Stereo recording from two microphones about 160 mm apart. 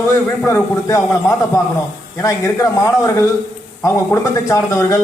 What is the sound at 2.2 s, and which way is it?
Speech, 20° left (ahead or behind).